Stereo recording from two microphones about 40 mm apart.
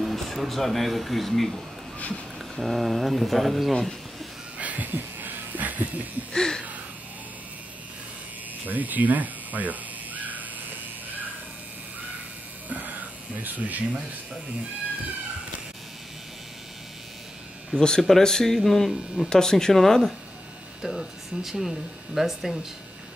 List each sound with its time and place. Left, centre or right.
0.0 s speech: centre
2.0 s speech: left
2.6 s speech: centre
4.6 s a sound: right
4.9 s a sound: right
6.3 s speech: centre
8.6 s crow: right
12.6 s a sound: right
17.7 s speech: centre
20.8 s speech: centre